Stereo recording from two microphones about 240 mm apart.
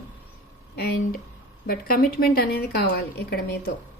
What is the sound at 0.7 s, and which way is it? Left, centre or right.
A woman's voice, left.